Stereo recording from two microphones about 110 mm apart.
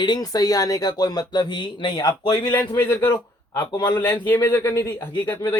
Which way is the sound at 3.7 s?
40° left (ahead or behind).